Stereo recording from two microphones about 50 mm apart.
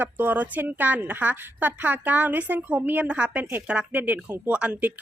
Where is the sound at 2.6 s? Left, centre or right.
Right.